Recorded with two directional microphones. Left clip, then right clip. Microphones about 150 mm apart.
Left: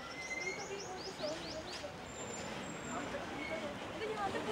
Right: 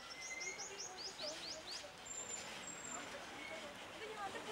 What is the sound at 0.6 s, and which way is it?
Bird, 10° left (ahead or behind).